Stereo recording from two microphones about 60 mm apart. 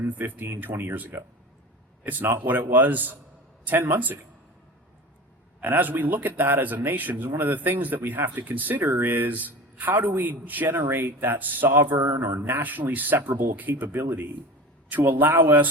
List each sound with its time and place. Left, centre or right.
0.0 s a man's voice: right
5.5 s speech: right
12.6 s speech: right